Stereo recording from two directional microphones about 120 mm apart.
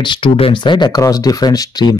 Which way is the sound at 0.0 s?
45° left (ahead or behind).